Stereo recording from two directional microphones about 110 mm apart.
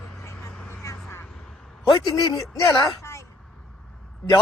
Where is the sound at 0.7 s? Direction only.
25° left (ahead or behind).